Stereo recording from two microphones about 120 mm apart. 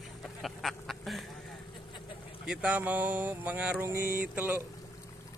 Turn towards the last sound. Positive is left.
turn(degrees=-15)  # may be behind; listen again after turning